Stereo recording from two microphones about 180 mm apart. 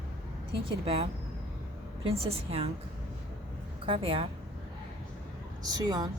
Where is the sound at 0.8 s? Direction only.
30° right (ahead or behind).